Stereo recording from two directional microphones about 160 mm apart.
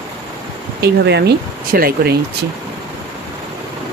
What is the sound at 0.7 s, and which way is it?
Speech, 90° right.